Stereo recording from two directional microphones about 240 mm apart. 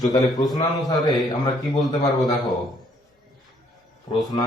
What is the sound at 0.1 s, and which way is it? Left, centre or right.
A man's voice, centre.